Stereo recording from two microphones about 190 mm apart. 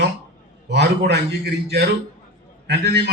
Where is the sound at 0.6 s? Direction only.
60° right (ahead or behind).